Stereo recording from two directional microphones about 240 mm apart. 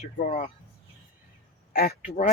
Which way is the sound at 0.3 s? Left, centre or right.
Left.